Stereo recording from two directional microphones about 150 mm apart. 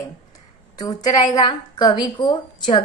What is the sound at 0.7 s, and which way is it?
A woman's voice, 25° left (ahead or behind).